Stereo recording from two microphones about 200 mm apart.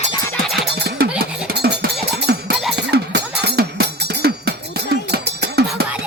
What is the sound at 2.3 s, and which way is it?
Music, 55° right (ahead or behind).